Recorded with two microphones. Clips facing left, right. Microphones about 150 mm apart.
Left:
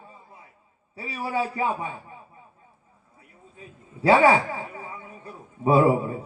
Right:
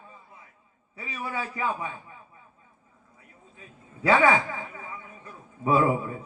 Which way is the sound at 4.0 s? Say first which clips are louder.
Left 3 dB; 35° left (ahead or behind).